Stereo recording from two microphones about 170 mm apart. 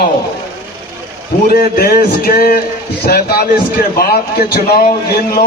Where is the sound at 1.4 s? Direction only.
65° left (ahead or behind).